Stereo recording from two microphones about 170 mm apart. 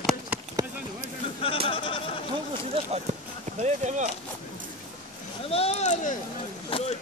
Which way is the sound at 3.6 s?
45° right (ahead or behind).